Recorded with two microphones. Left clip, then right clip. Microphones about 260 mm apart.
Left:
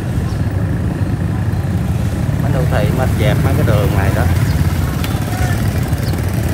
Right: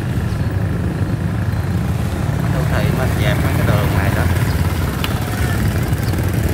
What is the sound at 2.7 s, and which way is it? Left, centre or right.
Vehicle, centre.